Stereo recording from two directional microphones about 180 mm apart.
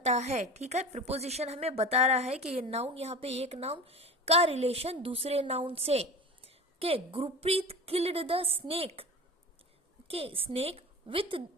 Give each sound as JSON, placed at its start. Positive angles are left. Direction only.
{"t": 0.0, "sound": "a woman's voice", "side_deg": -40}
{"t": 10.1, "sound": "a woman's voice", "side_deg": -30}